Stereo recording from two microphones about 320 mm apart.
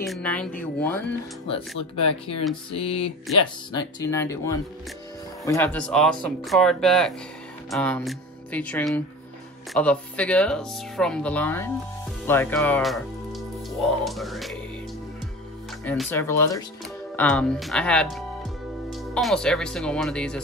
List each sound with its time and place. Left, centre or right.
0.0 s speech: centre
2.0 s speech: centre
15.8 s speech: centre